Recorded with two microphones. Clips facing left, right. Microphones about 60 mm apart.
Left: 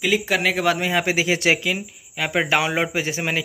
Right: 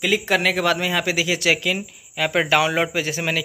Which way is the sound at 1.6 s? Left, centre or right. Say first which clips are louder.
Right 1 dB; centre.